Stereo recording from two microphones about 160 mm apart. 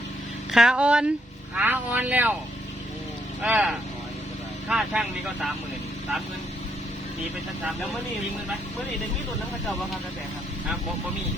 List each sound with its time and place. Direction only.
0.5 s speech: 5° right (ahead or behind)
3.4 s speech: 10° right (ahead or behind)